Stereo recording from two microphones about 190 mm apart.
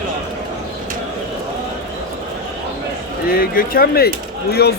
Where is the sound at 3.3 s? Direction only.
50° left (ahead or behind).